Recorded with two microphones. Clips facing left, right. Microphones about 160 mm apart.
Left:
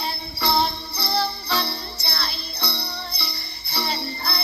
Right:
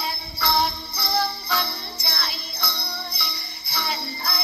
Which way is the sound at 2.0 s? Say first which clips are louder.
Left 1 dB; 10° right (ahead or behind).